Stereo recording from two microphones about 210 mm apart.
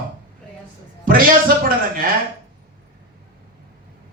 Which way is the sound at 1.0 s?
45° right (ahead or behind).